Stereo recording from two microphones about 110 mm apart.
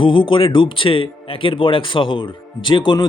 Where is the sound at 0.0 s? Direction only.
50° left (ahead or behind).